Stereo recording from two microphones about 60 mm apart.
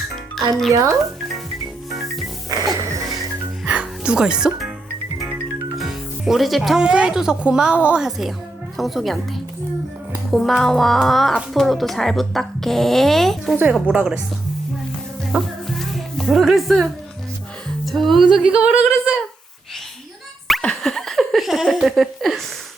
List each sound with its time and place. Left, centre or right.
0.3 s a child's voice: centre
0.7 s speech: right
2.5 s music: right
3.7 s music: centre
6.2 s speech: centre
6.7 s a sound: centre
7.8 s a woman's voice: right
8.0 s speech: centre
13.8 s a sound: centre
15.4 s music: centre
18.3 s a sound: centre
20.6 s laughter: centre